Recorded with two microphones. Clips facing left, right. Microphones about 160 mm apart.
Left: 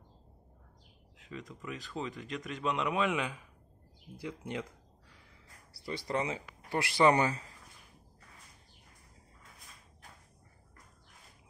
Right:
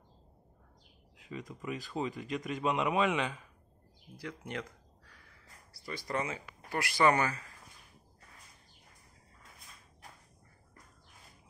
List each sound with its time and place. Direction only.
1.7 s a man's voice: 5° right (ahead or behind)
4.2 s a sound: 20° left (ahead or behind)
5.9 s speech: 25° left (ahead or behind)